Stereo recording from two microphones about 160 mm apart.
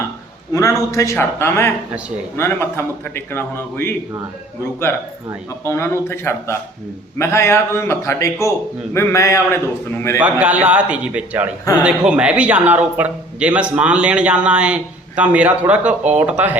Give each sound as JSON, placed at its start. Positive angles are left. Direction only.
{"t": 0.5, "sound": "a man's voice", "side_deg": 20}
{"t": 10.2, "sound": "a man's voice", "side_deg": -10}